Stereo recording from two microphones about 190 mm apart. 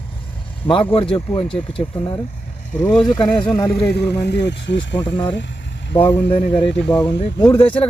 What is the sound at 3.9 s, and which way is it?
Speech, 60° left (ahead or behind).